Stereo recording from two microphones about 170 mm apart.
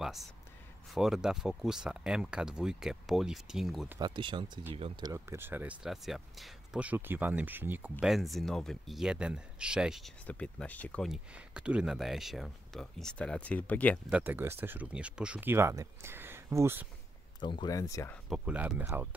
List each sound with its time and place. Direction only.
0.0 s a sound: centre (ahead or behind)
0.9 s speech: 5° right (ahead or behind)
4.0 s speech: 30° right (ahead or behind)
5.0 s speech: 15° right (ahead or behind); by 13.9 s 10° left (ahead or behind)
14.1 s speech: 10° right (ahead or behind)
17.4 s speech: 30° left (ahead or behind)
18.3 s speech: 5° right (ahead or behind)